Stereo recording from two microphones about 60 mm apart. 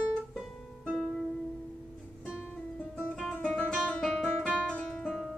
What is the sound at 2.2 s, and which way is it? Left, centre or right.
Music, centre.